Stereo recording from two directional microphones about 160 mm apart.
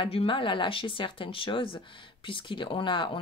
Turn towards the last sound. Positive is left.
turn(degrees=30)  # may be behind; listen again after turning